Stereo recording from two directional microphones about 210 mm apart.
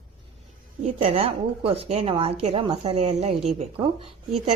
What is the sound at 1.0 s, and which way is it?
A woman's voice, 25° right (ahead or behind).